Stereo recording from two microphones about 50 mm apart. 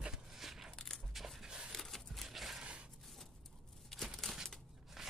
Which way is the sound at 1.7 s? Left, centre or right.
Centre.